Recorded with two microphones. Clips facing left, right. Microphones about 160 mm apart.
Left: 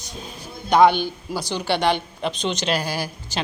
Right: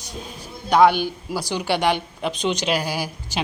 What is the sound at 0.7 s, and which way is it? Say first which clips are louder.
Speech: even; 5° right (ahead or behind).